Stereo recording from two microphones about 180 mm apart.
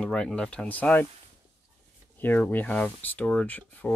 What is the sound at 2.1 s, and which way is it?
Speech, 10° left (ahead or behind).